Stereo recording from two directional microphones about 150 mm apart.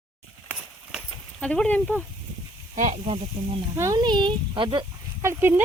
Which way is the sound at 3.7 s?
25° right (ahead or behind).